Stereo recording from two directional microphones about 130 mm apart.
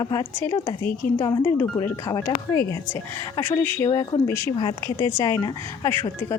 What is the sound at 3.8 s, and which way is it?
Speech, 30° left (ahead or behind).